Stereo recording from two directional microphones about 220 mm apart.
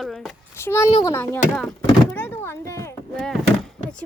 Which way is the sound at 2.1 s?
10° left (ahead or behind).